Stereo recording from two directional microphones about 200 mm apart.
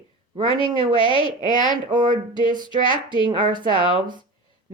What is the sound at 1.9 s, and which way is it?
Speech, 20° right (ahead or behind).